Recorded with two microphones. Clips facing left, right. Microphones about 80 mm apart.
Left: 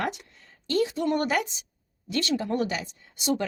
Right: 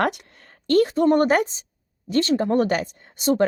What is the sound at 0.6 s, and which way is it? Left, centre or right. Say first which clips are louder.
Speech: right 8 dB; right.